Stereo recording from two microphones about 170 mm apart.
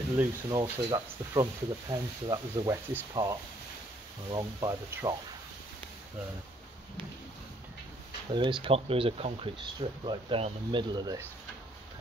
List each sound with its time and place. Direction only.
0.5 s speech: 30° right (ahead or behind)
8.3 s speech: 30° right (ahead or behind)